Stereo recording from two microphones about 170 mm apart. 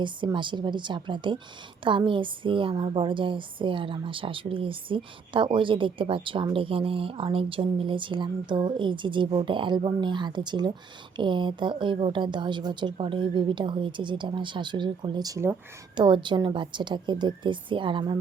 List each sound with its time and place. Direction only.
0.0 s a woman's voice: 30° right (ahead or behind)